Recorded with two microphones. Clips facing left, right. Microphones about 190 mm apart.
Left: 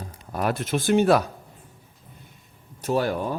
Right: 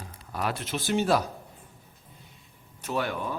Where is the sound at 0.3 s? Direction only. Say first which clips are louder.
Left 6 dB; 50° left (ahead or behind).